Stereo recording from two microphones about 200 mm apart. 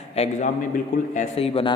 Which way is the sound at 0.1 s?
35° left (ahead or behind).